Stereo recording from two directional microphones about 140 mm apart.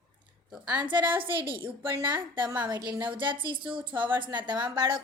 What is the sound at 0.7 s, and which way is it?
Speech, 35° right (ahead or behind).